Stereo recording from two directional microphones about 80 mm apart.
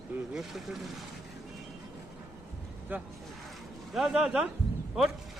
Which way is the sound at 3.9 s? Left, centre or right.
Centre.